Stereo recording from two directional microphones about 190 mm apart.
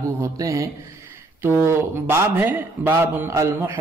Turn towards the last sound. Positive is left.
turn(degrees=-15)  # may be behind; listen again after turning